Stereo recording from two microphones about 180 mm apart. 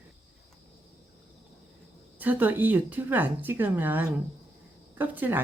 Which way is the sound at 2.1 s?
10° right (ahead or behind).